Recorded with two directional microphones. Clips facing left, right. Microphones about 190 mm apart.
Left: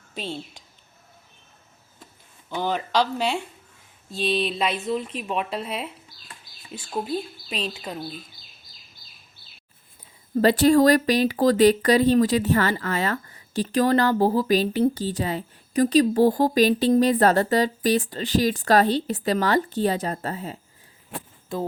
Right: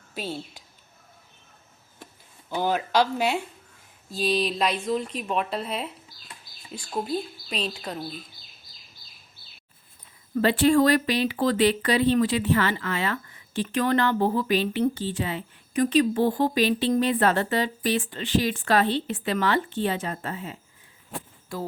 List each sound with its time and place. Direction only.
0.1 s speech: 5° right (ahead or behind)
2.5 s speech: 10° right (ahead or behind); by 7.9 s 5° left (ahead or behind)
10.3 s speech: 40° left (ahead or behind)
21.5 s speech: 25° left (ahead or behind)